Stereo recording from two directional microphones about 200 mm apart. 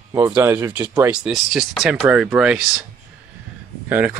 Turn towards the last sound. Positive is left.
turn(degrees=-10)  # may be behind; listen again after turning